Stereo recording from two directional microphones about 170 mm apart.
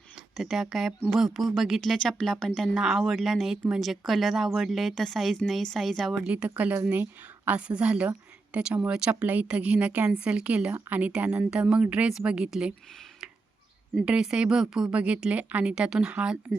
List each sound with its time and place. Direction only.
0.3 s a woman's voice: centre (ahead or behind)
13.9 s speech: 5° right (ahead or behind)